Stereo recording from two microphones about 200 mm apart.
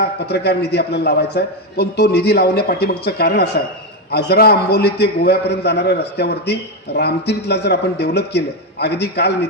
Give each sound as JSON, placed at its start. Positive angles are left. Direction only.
{"t": 0.0, "sound": "a man's voice", "side_deg": 55}